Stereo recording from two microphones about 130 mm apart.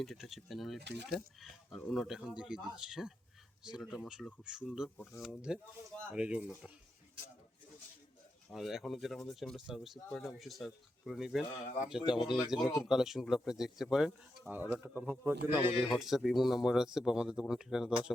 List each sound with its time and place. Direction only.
0.0 s speech: centre (ahead or behind)
8.4 s speech: centre (ahead or behind)
14.5 s speech: 15° right (ahead or behind)
15.9 s speech: centre (ahead or behind)